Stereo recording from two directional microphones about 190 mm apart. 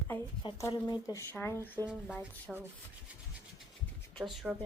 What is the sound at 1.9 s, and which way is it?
Speech, 5° right (ahead or behind).